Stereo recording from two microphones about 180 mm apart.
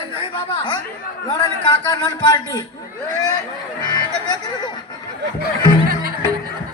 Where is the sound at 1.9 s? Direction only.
20° left (ahead or behind).